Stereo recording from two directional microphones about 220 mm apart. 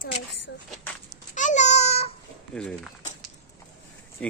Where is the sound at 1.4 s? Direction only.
35° left (ahead or behind).